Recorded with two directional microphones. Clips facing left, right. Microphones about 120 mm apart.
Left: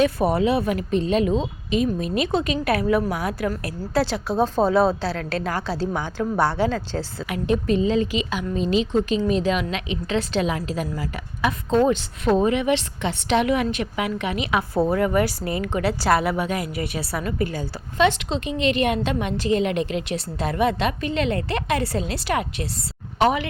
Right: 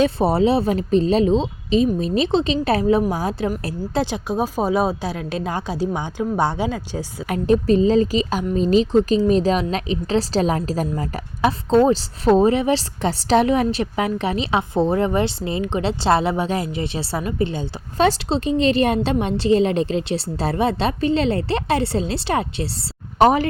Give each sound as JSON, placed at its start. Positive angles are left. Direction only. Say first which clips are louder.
{"t": 0.0, "sound": "speech", "louder": "right 2 dB", "side_deg": -30}
{"t": 4.0, "sound": "a woman's voice", "louder": "even", "side_deg": -15}
{"t": 7.3, "sound": "a woman's voice", "louder": "right 5 dB", "side_deg": -40}
{"t": 10.8, "sound": "speech", "louder": "right 4 dB", "side_deg": -25}
{"t": 17.9, "sound": "a woman's voice", "louder": "right 2 dB", "side_deg": -35}